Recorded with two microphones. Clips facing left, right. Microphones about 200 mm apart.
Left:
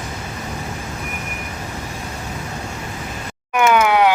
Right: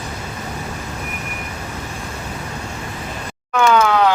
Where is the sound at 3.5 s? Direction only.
20° left (ahead or behind).